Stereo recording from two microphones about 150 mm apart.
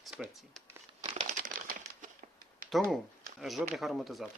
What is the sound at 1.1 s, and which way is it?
Crumpling, 55° right (ahead or behind).